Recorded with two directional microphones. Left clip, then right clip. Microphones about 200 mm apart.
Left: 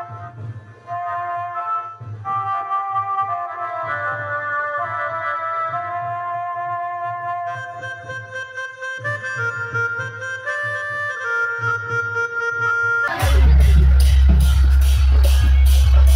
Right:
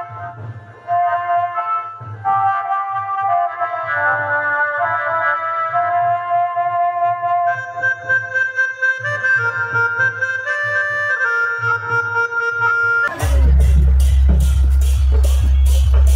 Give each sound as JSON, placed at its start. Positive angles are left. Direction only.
{"t": 0.8, "sound": "music", "side_deg": 50}